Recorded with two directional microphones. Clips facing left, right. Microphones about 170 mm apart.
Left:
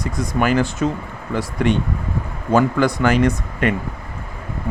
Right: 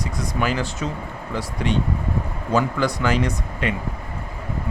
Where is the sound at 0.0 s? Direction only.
50° left (ahead or behind).